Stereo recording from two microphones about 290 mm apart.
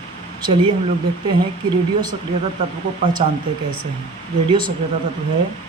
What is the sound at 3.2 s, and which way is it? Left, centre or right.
Speech, right.